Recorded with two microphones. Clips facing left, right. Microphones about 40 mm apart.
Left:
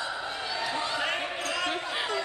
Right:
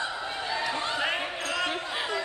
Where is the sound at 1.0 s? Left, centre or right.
Centre.